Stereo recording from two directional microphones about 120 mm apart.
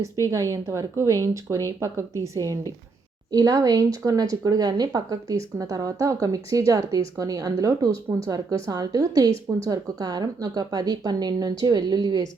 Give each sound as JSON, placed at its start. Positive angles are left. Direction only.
{"t": 0.0, "sound": "speech", "side_deg": -25}